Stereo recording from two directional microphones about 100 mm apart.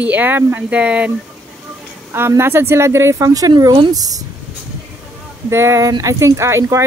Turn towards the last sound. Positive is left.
turn(degrees=-30)  # may be behind; listen again after turning